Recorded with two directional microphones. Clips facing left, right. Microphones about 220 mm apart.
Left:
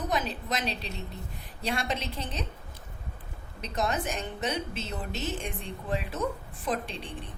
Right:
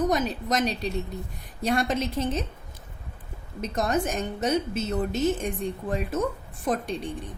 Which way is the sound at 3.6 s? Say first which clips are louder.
Right 5 dB; 45° right (ahead or behind).